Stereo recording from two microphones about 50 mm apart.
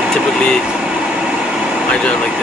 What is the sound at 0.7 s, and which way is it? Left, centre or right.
Air conditioning, centre.